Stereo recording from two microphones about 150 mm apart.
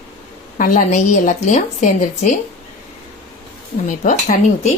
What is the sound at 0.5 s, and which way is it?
A woman's voice, 60° left (ahead or behind).